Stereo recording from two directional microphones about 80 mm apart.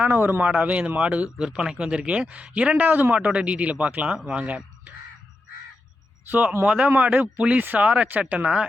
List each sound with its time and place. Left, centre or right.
0.0 s a man's voice: right
6.2 s a man's voice: right